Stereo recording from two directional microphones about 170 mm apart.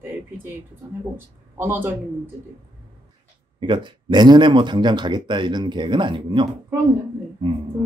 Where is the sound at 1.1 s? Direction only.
15° right (ahead or behind).